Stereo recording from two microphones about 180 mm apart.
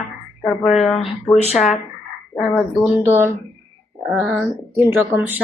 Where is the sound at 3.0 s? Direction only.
15° right (ahead or behind).